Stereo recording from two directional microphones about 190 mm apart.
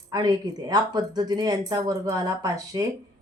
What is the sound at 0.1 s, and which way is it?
Speech, 20° right (ahead or behind).